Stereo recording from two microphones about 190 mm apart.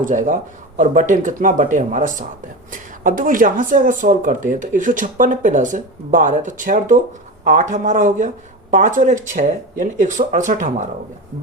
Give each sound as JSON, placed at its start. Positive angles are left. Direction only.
{"t": 0.0, "sound": "speech", "side_deg": -40}